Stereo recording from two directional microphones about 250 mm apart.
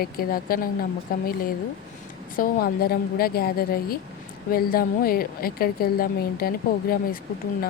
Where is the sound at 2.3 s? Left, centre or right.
Left.